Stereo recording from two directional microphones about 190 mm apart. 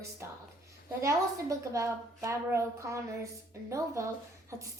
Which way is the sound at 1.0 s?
15° right (ahead or behind).